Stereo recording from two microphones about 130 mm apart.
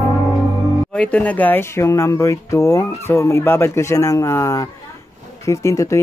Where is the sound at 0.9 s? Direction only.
10° left (ahead or behind).